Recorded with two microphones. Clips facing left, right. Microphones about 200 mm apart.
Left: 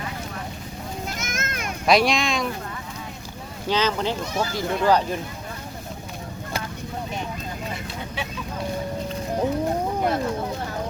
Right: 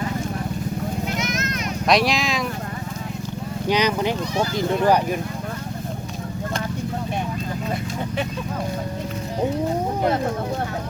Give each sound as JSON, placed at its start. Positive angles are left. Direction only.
{"t": 1.1, "sound": "a sound", "side_deg": 50}
{"t": 1.9, "sound": "speech", "side_deg": 0}
{"t": 3.7, "sound": "speech", "side_deg": -15}